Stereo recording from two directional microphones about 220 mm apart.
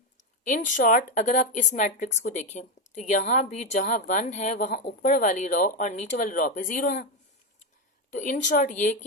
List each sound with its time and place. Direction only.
0.4 s speech: 35° left (ahead or behind)
8.1 s speech: 35° left (ahead or behind)